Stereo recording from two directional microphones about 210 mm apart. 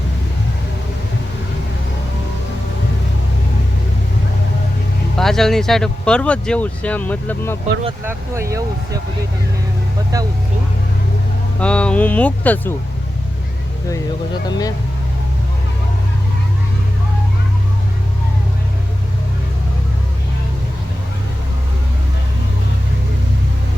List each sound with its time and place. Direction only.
5.1 s speech: centre (ahead or behind)
8.0 s speech: 15° right (ahead or behind)
11.6 s speech: 5° left (ahead or behind)
14.4 s speech: 20° left (ahead or behind)